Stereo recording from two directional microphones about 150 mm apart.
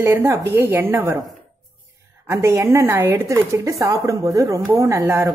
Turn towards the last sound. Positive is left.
turn(degrees=-20)  # may be behind; listen again after turning